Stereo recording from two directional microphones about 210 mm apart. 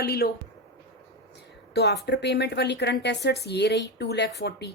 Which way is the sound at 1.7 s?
50° left (ahead or behind).